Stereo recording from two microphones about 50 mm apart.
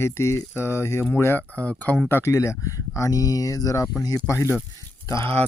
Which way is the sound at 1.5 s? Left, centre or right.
Left.